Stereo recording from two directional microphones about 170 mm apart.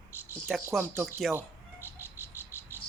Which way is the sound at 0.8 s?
10° right (ahead or behind).